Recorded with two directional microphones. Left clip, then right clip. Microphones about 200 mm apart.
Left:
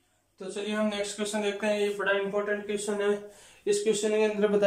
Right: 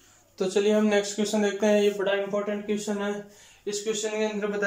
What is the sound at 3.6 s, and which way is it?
Speech, 15° left (ahead or behind).